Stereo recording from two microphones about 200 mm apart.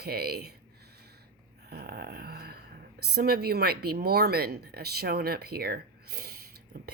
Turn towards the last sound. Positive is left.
turn(degrees=-50)  # may be behind; listen again after turning